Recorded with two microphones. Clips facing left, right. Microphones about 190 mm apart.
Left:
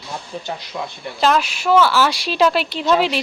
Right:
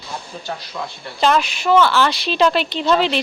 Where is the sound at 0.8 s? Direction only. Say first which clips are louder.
Left 2 dB; 20° left (ahead or behind).